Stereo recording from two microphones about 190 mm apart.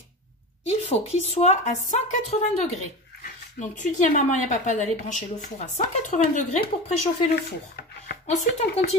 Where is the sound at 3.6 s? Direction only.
40° left (ahead or behind).